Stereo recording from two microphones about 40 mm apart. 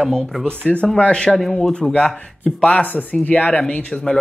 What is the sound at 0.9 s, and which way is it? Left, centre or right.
Speech, left.